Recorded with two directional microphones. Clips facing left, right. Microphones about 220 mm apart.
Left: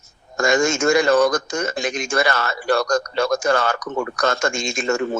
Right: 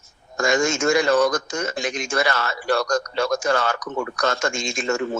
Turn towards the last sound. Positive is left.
turn(degrees=45)  # may be behind; listen again after turning